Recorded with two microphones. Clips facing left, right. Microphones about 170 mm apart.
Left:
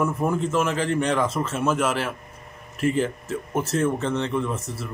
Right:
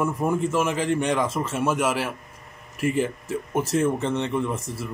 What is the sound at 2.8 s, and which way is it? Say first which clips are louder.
Speech: left 1 dB; 65° left (ahead or behind).